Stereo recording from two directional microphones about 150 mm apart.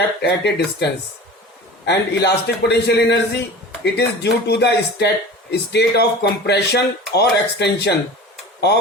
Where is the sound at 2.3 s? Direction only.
90° left.